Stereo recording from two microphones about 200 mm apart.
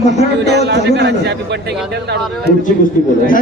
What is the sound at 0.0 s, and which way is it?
Speech, 35° left (ahead or behind).